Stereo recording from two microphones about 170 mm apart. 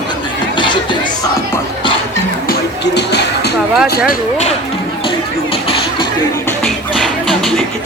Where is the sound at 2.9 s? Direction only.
80° left.